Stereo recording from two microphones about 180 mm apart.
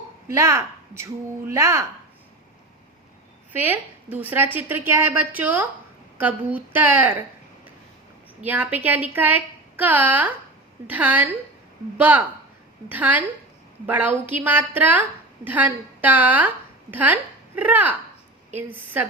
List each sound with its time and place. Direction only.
0.3 s a woman's voice: 15° right (ahead or behind)
3.5 s a woman's voice: 10° right (ahead or behind)
8.4 s a woman's voice: 10° right (ahead or behind)